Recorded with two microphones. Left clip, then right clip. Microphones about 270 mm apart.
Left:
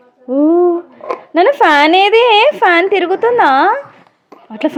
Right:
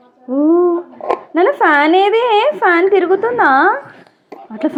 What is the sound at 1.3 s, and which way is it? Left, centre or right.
A woman's voice, left.